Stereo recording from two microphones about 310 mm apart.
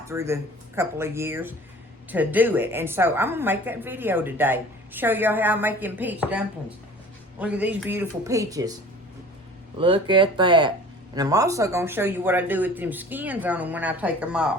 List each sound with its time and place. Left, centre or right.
0.1 s a woman's voice: centre
9.7 s a woman's voice: centre